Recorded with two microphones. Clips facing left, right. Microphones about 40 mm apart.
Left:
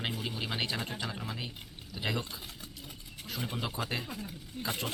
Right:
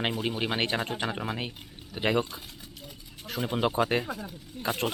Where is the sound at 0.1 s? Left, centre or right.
Right.